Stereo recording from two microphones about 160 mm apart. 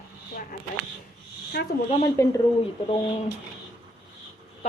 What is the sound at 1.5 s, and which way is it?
Speech, 75° left (ahead or behind).